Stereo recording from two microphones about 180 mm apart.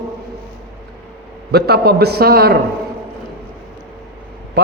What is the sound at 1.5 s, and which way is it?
A man's voice, 65° right (ahead or behind).